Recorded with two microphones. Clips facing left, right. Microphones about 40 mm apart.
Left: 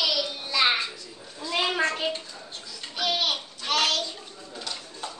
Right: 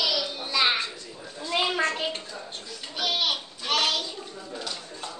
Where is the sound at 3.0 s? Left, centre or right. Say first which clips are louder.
Even; centre.